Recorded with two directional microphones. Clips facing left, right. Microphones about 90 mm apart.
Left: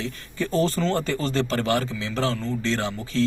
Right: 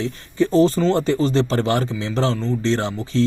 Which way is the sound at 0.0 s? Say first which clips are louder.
Right 8 dB; 25° right (ahead or behind).